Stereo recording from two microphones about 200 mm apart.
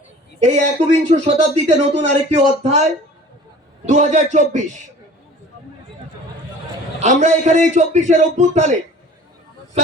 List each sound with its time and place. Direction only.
0.3 s speech: 35° right (ahead or behind)
7.0 s speech: 35° right (ahead or behind)